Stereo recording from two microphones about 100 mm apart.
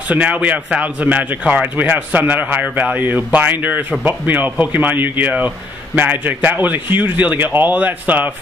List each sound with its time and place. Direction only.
0.1 s a man's voice: 15° right (ahead or behind)